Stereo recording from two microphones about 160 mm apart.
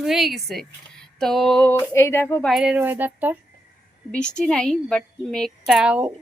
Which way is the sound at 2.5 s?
5° right (ahead or behind).